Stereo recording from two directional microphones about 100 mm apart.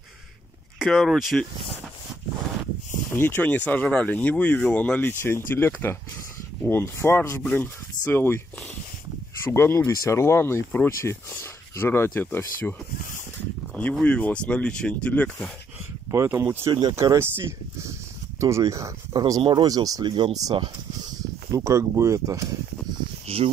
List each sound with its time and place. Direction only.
0.7 s speech: 5° left (ahead or behind)
3.1 s speech: 20° left (ahead or behind)
9.4 s speech: 25° left (ahead or behind)
13.9 s speech: 10° left (ahead or behind)
16.1 s speech: 30° right (ahead or behind); by 20.2 s 45° right (ahead or behind)
20.5 s snake: 45° right (ahead or behind)
21.5 s speech: 30° right (ahead or behind)
23.2 s cricket: 80° right